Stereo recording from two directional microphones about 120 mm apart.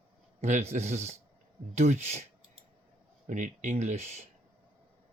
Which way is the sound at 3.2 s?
90° right.